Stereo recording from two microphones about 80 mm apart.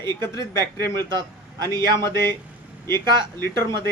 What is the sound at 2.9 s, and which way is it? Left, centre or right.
Speech, right.